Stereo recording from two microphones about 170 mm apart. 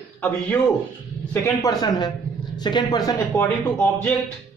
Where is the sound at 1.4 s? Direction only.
20° left (ahead or behind).